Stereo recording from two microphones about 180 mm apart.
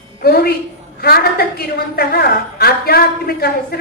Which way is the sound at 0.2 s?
60° left (ahead or behind).